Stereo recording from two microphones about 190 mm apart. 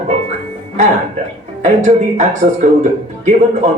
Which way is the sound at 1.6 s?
40° right (ahead or behind).